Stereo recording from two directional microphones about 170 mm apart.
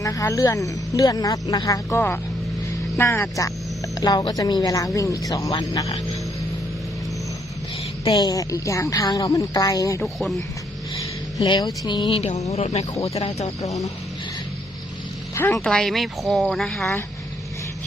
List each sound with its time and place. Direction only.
0.0 s speech: 20° left (ahead or behind)
8.0 s speech: 20° left (ahead or behind)
10.0 s speech: centre (ahead or behind)
11.3 s speech: 25° left (ahead or behind)
13.6 s speech: 20° left (ahead or behind)
15.5 s speech: 5° left (ahead or behind)